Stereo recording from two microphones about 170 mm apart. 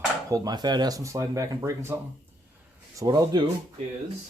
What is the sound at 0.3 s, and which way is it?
Speech, 20° right (ahead or behind).